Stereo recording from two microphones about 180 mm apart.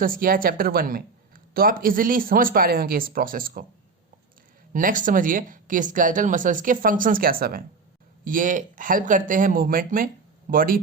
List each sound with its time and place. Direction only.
0.0 s speech: 50° right (ahead or behind)
4.7 s speech: 50° right (ahead or behind)